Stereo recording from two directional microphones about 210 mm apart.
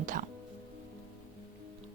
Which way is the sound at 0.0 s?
40° right (ahead or behind).